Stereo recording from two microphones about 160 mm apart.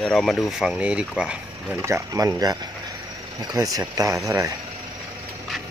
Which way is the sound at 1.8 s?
20° right (ahead or behind).